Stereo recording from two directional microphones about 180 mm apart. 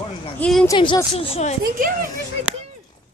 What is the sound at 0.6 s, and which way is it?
Speech, 25° left (ahead or behind).